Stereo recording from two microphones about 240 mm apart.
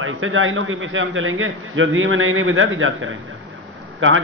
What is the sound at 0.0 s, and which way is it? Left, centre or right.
A man's voice, right.